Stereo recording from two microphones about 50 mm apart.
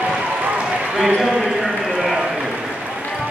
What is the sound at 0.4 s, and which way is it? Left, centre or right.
Run, right.